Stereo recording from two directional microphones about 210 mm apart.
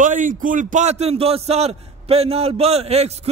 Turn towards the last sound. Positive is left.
turn(degrees=-30)  # may be behind; listen again after turning